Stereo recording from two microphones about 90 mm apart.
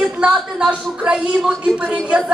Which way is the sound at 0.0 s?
10° right (ahead or behind).